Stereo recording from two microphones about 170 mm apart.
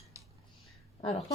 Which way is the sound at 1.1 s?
35° left (ahead or behind).